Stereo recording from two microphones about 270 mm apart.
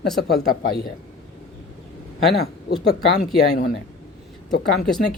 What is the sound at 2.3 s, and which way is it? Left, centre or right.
Speech, left.